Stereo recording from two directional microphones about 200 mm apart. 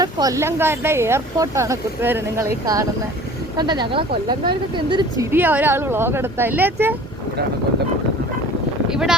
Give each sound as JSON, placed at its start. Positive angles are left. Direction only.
{"t": 0.0, "sound": "speech", "side_deg": -20}
{"t": 5.3, "sound": "speech", "side_deg": -10}